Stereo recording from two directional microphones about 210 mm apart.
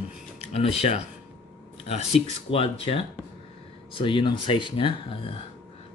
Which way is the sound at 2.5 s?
25° left (ahead or behind).